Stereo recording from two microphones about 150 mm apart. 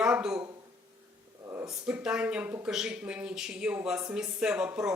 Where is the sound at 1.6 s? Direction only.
5° right (ahead or behind).